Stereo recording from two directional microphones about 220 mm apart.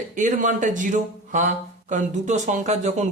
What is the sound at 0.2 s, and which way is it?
Speech, 35° right (ahead or behind).